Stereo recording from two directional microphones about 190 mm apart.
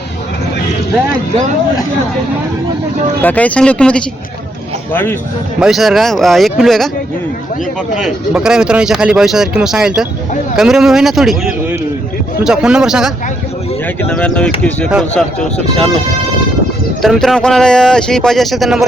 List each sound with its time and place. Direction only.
3.2 s speech: 10° left (ahead or behind)
5.5 s speech: centre (ahead or behind)
7.9 s speech: centre (ahead or behind)
13.8 s speech: 10° left (ahead or behind)
17.0 s speech: centre (ahead or behind)